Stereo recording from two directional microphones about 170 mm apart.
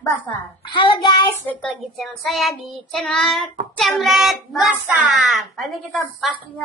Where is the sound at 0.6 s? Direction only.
30° left (ahead or behind).